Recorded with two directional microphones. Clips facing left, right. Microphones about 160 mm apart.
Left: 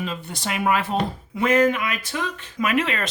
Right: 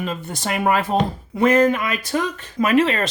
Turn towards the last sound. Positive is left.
turn(degrees=-30)  # may be behind; listen again after turning